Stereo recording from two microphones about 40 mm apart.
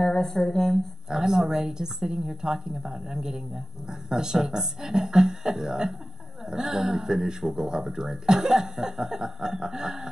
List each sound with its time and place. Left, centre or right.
0.0 s speech: centre
1.1 s speech: centre